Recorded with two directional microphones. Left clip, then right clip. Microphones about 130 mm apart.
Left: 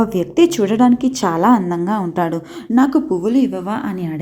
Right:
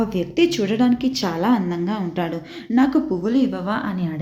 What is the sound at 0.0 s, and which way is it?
A woman's voice, 35° left (ahead or behind).